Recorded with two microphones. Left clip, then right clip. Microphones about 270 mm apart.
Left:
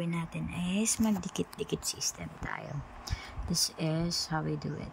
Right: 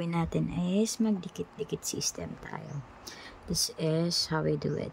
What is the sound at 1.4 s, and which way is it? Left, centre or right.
Speech, centre.